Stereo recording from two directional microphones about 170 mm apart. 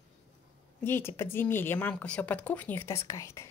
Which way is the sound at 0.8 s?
15° left (ahead or behind).